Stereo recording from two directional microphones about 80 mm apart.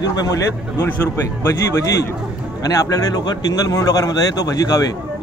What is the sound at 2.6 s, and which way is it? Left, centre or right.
Speech, left.